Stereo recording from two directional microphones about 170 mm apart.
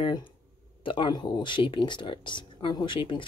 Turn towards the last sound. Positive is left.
turn(degrees=30)  # may be behind; listen again after turning